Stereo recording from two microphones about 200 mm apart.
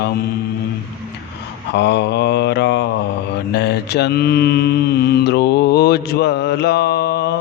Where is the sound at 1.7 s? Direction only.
60° left (ahead or behind).